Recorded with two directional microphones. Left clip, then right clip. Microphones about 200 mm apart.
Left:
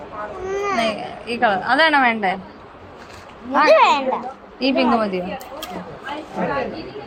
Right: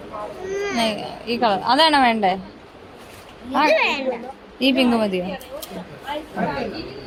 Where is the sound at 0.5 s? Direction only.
10° left (ahead or behind).